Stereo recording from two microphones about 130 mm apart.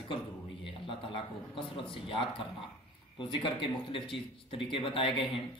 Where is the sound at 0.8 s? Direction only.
40° left (ahead or behind).